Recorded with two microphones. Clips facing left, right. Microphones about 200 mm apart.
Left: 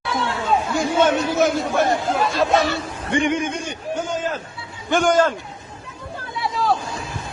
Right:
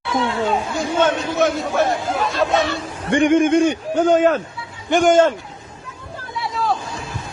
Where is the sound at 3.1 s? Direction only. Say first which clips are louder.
Right 7 dB; 50° right (ahead or behind).